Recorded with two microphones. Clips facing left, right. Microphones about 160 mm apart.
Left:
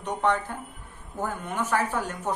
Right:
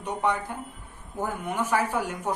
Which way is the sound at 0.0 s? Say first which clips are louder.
Left 1 dB; 10° right (ahead or behind).